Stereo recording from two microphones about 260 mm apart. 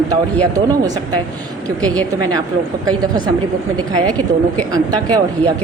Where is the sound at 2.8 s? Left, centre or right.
Centre.